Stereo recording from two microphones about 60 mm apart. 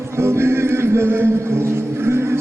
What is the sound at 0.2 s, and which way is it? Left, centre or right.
Music, right.